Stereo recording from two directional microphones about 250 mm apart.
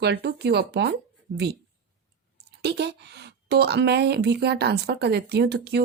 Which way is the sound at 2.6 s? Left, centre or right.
Right.